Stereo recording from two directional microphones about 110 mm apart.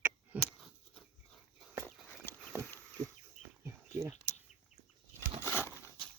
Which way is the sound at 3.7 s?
25° right (ahead or behind).